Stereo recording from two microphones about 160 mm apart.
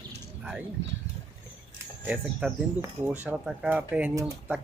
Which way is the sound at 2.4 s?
5° right (ahead or behind).